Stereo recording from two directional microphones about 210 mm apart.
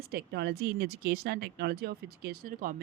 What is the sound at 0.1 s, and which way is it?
Speech, 50° right (ahead or behind).